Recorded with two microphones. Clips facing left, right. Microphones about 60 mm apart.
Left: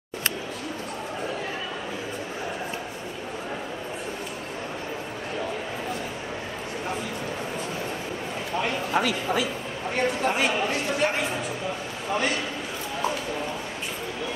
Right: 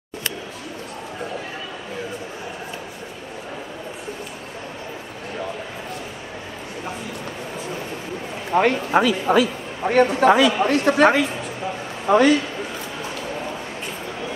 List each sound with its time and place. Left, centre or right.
8.5 s a man's voice: right
10.6 s a man's voice: right